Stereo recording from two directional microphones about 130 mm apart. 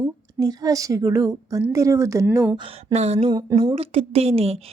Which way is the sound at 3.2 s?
30° right (ahead or behind).